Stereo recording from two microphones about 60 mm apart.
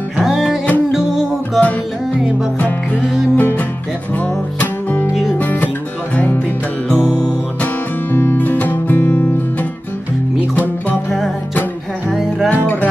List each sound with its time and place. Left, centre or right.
0.2 s music: centre
3.3 s music: left
5.4 s music: left
6.9 s music: left
10.5 s music: left
12.1 s music: centre